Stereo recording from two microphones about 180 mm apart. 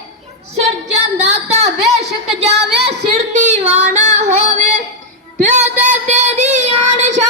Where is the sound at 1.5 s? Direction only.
35° right (ahead or behind).